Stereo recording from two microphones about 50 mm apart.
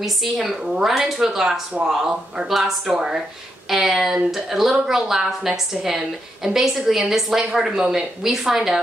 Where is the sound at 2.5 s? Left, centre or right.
Centre.